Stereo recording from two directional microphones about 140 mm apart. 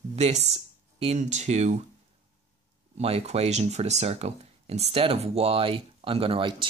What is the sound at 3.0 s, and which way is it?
Speech, 45° right (ahead or behind).